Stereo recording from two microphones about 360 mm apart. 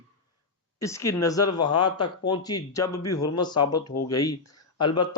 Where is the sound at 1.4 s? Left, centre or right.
Left.